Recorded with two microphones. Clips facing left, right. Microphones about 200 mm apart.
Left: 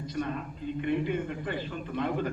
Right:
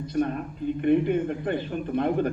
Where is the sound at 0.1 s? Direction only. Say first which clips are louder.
Right 8 dB; 55° right (ahead or behind).